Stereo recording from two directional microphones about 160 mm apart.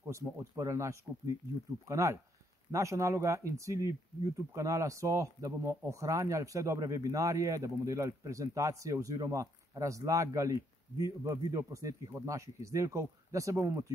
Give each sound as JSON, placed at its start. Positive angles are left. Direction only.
{"t": 0.0, "sound": "speech", "side_deg": -20}